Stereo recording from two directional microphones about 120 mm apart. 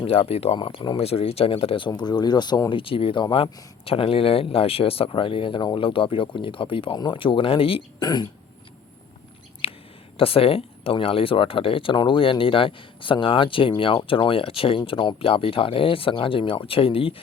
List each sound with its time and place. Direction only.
0.0 s speech: 50° left (ahead or behind)
2.0 s speech: 35° left (ahead or behind)
2.6 s speech: 45° left (ahead or behind)
7.9 s speech: 35° left (ahead or behind)
9.6 s whispering: 50° left (ahead or behind)
10.2 s speech: 50° left (ahead or behind)